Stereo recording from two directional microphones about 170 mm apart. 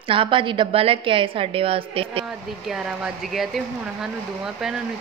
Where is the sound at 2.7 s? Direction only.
5° right (ahead or behind).